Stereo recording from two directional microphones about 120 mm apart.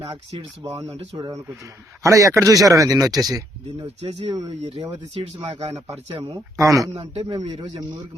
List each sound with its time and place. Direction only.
0.1 s speech: 50° right (ahead or behind)
0.6 s speech: 30° right (ahead or behind)
4.0 s speech: 55° right (ahead or behind)
6.2 s speech: 25° right (ahead or behind)
7.1 s speech: 55° right (ahead or behind)